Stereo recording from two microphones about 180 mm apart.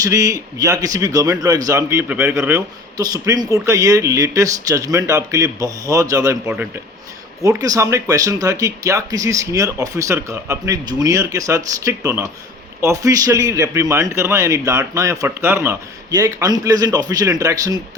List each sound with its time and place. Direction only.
0.0 s a man's voice: 20° right (ahead or behind)
7.4 s a man's voice: 20° right (ahead or behind)